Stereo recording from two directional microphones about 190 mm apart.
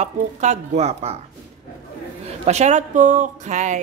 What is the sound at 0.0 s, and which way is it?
Speech, 35° right (ahead or behind).